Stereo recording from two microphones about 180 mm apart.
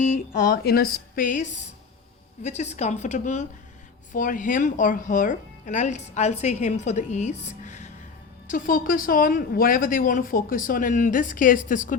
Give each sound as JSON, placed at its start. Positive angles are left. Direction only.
{"t": 0.0, "sound": "a woman's voice", "side_deg": 50}